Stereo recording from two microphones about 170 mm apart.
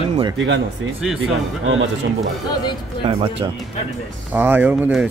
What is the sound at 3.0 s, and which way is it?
Speech, 35° right (ahead or behind).